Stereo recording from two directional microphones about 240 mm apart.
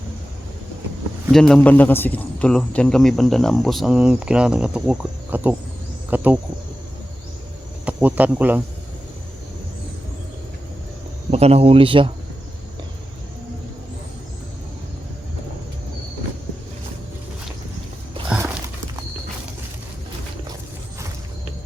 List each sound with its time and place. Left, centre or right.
1.3 s a man's voice: centre
7.9 s speech: centre
11.3 s a man's voice: right
18.3 s a sound: centre